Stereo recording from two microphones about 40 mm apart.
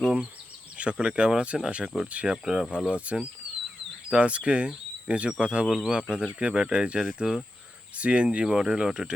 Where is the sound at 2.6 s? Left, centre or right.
Right.